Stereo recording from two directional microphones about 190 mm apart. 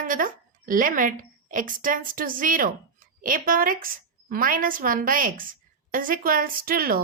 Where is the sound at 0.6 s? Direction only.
45° right (ahead or behind).